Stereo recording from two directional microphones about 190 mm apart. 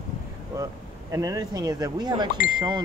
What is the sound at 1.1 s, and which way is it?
Speech, 20° right (ahead or behind).